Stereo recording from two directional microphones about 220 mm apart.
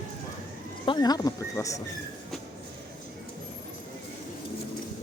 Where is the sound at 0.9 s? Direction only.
15° left (ahead or behind).